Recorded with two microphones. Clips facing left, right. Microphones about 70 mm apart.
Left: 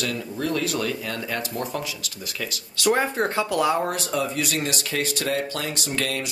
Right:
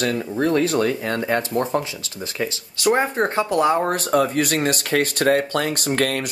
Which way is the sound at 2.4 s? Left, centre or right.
Right.